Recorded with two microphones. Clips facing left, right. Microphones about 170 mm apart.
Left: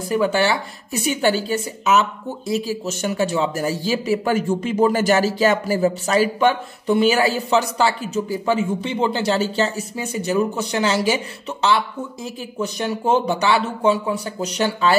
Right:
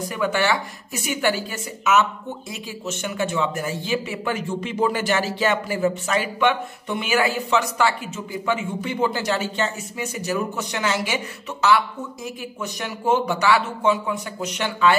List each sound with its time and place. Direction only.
0.1 s a woman's voice: 30° left (ahead or behind)
12.5 s a woman's voice: 30° left (ahead or behind)